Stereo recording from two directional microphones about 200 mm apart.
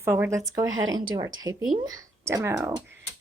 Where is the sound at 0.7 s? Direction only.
75° right (ahead or behind).